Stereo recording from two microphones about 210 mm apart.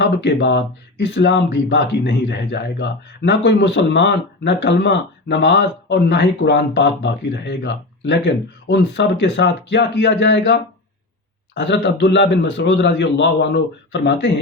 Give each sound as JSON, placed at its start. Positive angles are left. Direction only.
{"t": 0.0, "sound": "speech", "side_deg": 55}